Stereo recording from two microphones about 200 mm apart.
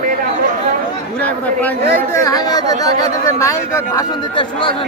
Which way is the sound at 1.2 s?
5° left (ahead or behind).